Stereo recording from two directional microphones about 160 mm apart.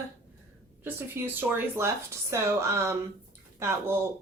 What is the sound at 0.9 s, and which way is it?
Speech, 15° right (ahead or behind).